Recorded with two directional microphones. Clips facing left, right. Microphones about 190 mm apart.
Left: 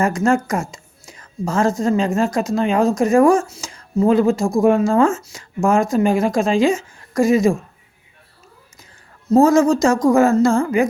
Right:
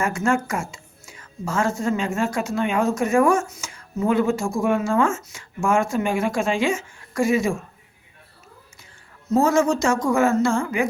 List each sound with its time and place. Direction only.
0.0 s a woman's voice: 35° left (ahead or behind)
9.3 s speech: 35° left (ahead or behind)